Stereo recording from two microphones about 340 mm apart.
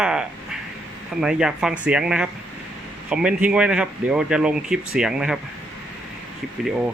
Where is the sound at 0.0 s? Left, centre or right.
Centre.